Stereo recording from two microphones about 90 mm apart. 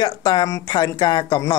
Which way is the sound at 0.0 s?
50° left (ahead or behind).